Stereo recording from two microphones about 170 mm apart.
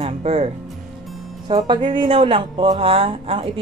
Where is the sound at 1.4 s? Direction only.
25° right (ahead or behind).